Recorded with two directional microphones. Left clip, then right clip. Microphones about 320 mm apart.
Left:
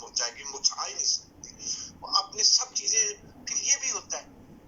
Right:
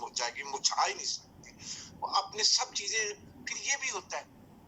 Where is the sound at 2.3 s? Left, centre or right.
Centre.